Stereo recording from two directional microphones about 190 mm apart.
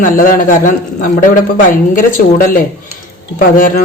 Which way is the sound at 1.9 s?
45° left (ahead or behind).